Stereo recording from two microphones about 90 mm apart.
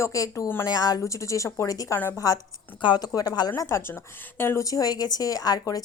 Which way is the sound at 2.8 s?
55° left (ahead or behind).